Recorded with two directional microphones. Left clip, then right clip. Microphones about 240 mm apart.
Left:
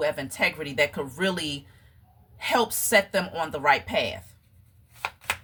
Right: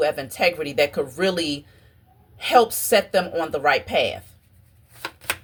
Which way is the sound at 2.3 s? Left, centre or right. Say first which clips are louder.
Right 7 dB; centre.